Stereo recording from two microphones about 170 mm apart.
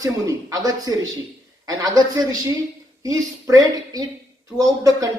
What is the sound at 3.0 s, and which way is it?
Speech, 20° right (ahead or behind).